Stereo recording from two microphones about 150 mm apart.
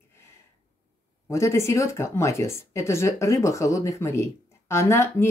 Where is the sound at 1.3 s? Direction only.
20° left (ahead or behind).